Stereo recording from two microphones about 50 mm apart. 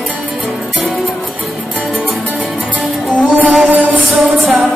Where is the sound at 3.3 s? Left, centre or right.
Right.